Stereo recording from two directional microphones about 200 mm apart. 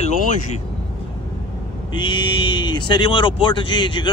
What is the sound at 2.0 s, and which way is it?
A man's voice, 20° left (ahead or behind).